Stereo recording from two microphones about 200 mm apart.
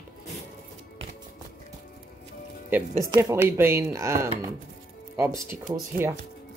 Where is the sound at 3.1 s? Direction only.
15° right (ahead or behind).